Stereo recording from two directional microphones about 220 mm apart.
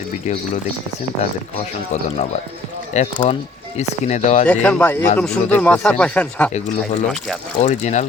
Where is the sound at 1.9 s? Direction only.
35° left (ahead or behind).